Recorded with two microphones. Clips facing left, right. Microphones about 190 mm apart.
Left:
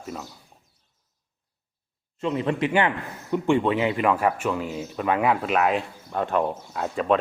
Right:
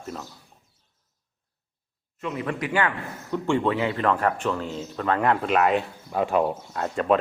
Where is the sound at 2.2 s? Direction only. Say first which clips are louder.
Left 5 dB; 25° left (ahead or behind); by 7.1 s centre (ahead or behind).